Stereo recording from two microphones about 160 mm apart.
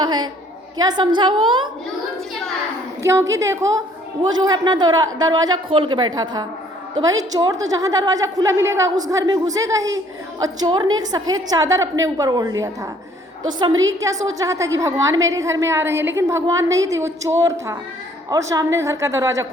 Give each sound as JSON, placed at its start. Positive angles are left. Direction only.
{"t": 0.0, "sound": "a woman's voice", "side_deg": -25}
{"t": 3.0, "sound": "a woman's voice", "side_deg": -15}